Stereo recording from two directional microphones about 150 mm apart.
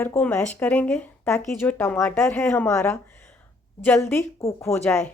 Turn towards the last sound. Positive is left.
turn(degrees=5)  # may be behind; listen again after turning